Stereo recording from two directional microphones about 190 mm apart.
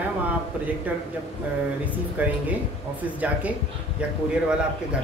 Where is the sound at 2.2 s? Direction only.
10° right (ahead or behind).